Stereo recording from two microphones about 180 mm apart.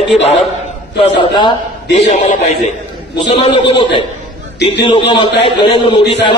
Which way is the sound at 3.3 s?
30° left (ahead or behind).